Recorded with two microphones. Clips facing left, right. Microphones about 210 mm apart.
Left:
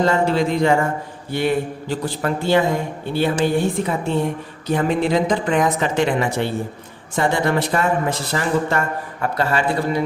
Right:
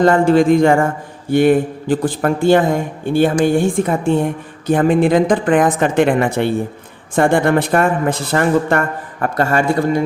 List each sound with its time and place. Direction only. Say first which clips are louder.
0.0 s a woman's voice: right 6 dB; 50° right (ahead or behind)